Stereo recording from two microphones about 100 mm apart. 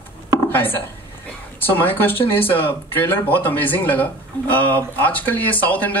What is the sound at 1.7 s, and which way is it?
Speech, 20° left (ahead or behind).